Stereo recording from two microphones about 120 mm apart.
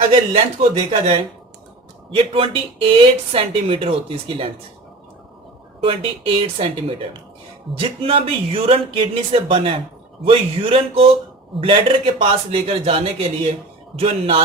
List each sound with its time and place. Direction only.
0.1 s speech: 55° right (ahead or behind)
2.1 s speech: 45° right (ahead or behind)
5.8 s speech: 55° right (ahead or behind)